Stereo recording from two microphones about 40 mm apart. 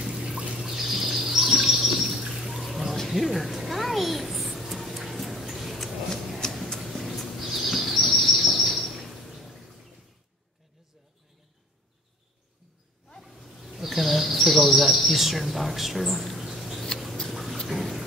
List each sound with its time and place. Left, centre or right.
0.0 s trickle: centre
0.6 s bird: centre
1.6 s chirp: centre
2.3 s a sound: centre
6.8 s bird vocalization: centre
8.8 s a sound: centre
13.2 s bird: centre
15.0 s speech: centre
17.3 s a sound: centre